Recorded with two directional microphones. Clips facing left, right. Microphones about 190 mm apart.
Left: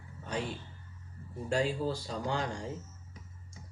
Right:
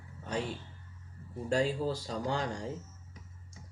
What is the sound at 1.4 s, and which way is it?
Speech, 40° right (ahead or behind).